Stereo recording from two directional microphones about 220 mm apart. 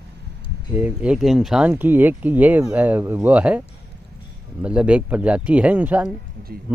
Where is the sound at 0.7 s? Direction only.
5° right (ahead or behind).